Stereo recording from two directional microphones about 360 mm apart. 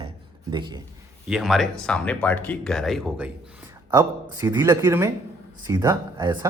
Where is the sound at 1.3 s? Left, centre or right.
Centre.